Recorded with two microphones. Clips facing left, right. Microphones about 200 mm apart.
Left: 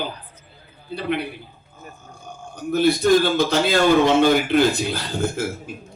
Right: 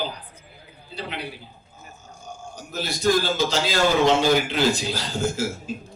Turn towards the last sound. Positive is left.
turn(degrees=55)  # may be behind; listen again after turning